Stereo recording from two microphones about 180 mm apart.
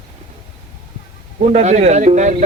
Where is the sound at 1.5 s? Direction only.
40° right (ahead or behind).